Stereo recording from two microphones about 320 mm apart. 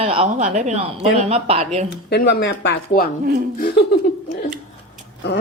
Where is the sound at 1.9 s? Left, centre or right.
Left.